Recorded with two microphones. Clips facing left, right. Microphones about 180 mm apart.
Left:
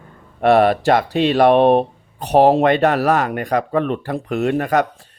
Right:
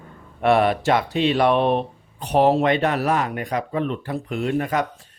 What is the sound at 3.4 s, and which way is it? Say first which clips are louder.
Speech: left 5 dB; 60° left (ahead or behind).